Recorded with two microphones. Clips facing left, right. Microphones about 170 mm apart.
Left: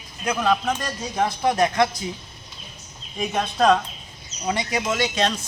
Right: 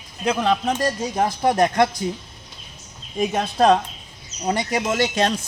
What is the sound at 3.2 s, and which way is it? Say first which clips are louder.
Speech: right 3 dB; 40° right (ahead or behind).